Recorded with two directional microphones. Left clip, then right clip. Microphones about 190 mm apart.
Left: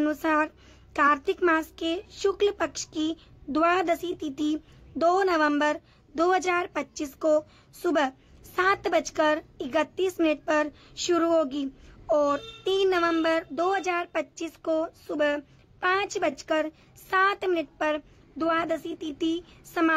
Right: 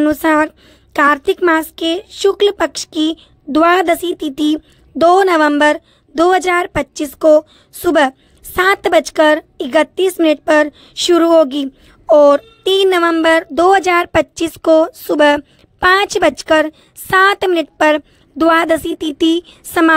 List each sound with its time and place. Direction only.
0.0 s a woman's voice: 45° right (ahead or behind)